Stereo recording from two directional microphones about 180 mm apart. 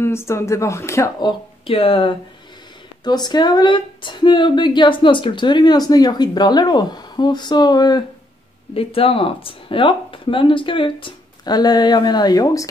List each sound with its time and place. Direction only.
0.0 s speech: 15° left (ahead or behind)
1.7 s speech: 30° left (ahead or behind)